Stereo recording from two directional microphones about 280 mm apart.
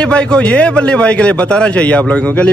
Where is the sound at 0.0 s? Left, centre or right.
Centre.